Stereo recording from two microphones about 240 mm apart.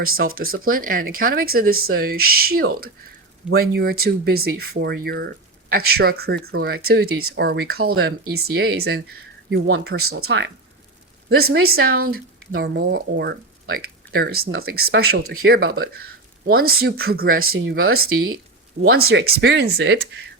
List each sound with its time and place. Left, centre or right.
0.0 s speech: right
7.1 s speech: right
7.3 s speech: right
9.5 s speech: right
9.9 s speech: right
11.5 s speech: right
17.4 s speech: right
17.7 s speech: right